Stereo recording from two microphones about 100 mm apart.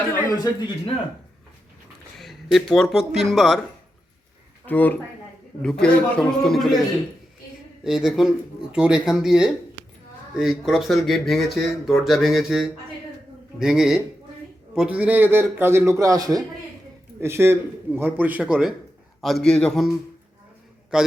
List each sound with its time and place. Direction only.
0.3 s a man's voice: 35° left (ahead or behind)
2.1 s speech: centre (ahead or behind)
4.6 s a man's voice: 15° left (ahead or behind)
5.6 s speech: 5° left (ahead or behind)
7.9 s speech: 5° right (ahead or behind)
9.8 s a sound: 50° right (ahead or behind)
10.3 s a man's voice: 5° right (ahead or behind); by 16.4 s 35° right (ahead or behind)
17.2 s a man's voice: 25° right (ahead or behind); by 18.7 s 10° right (ahead or behind)
19.2 s speech: 5° left (ahead or behind)
20.9 s speech: 5° right (ahead or behind)